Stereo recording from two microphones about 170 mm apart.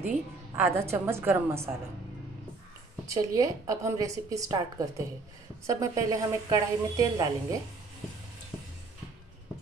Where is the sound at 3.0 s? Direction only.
20° right (ahead or behind).